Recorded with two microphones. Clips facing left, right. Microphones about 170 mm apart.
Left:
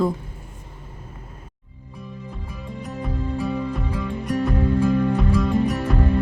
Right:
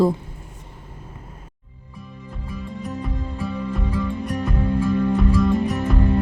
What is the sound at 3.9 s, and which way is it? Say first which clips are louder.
Music: left 2 dB; centre (ahead or behind).